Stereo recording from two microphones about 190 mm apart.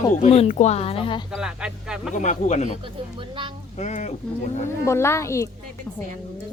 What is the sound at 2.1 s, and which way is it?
Speech, 40° left (ahead or behind).